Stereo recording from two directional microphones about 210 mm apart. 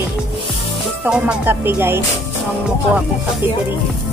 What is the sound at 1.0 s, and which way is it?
Speech, 5° right (ahead or behind).